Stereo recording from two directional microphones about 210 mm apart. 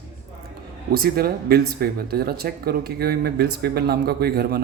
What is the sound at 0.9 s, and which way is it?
Speech, 45° right (ahead or behind).